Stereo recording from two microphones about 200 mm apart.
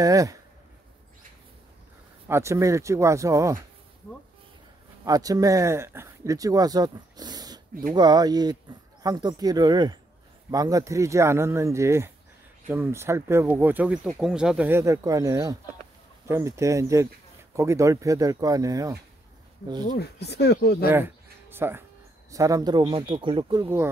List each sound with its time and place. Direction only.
0.0 s speech: 15° right (ahead or behind)
2.2 s speech: 15° right (ahead or behind)
5.0 s speech: 20° right (ahead or behind)
20.0 s speech: 55° left (ahead or behind)
20.9 s a sound: 10° right (ahead or behind)
22.3 s speech: 15° right (ahead or behind)